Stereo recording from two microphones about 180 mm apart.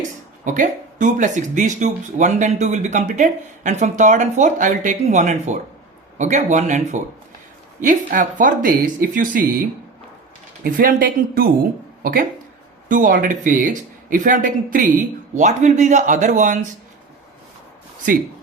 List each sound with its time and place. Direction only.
0.4 s speech: 45° right (ahead or behind)
10.6 s speech: 50° right (ahead or behind)
12.9 s speech: 50° right (ahead or behind)